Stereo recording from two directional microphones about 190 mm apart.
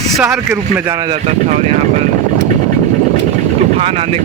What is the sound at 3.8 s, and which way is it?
Speech, 35° right (ahead or behind).